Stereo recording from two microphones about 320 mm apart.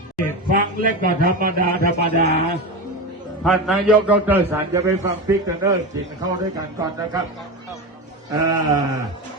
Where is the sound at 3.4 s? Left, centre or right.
Centre.